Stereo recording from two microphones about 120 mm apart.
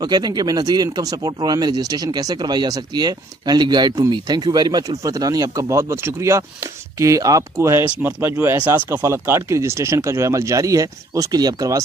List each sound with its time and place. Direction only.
0.0 s speech: 35° right (ahead or behind)